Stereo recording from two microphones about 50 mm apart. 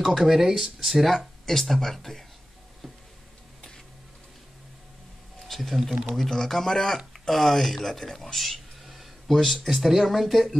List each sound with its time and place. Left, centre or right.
0.0 s speech: centre
5.5 s speech: centre